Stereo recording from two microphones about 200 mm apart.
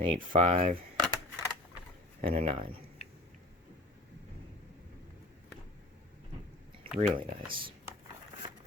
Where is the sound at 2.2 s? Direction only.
30° right (ahead or behind).